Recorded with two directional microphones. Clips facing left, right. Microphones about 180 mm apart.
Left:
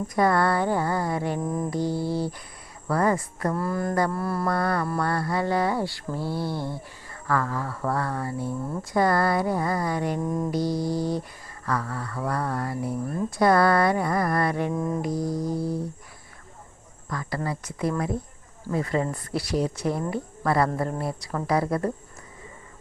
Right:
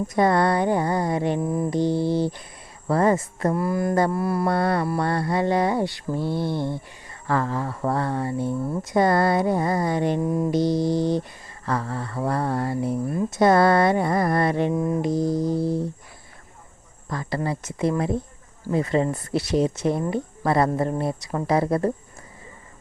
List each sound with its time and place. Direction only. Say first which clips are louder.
0.1 s mantra: right 2 dB; 25° right (ahead or behind)
1.4 s mantra: right 3 dB; 10° right (ahead or behind)
1.7 s mantra: right 7 dB; 20° right (ahead or behind)
3.6 s mantra: right 3 dB; 10° right (ahead or behind)
4.4 s mantra: right 2 dB; 25° right (ahead or behind)
10.2 s mantra: right 4 dB; 10° right (ahead or behind)
10.5 s mantra: right 5 dB; 25° right (ahead or behind)
14.7 s mantra: right 4 dB; 10° right (ahead or behind)
15.0 s mantra: right 5 dB; 25° right (ahead or behind)
17.1 s mantra: right 3 dB; 25° right (ahead or behind)